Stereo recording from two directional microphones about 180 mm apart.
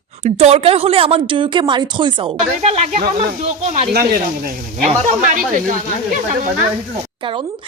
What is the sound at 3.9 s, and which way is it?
Speech, 55° right (ahead or behind).